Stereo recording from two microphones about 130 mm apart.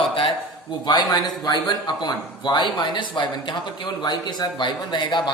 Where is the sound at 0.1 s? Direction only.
40° left (ahead or behind).